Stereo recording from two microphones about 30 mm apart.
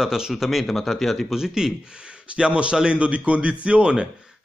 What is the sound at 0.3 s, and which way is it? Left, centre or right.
Speech, centre.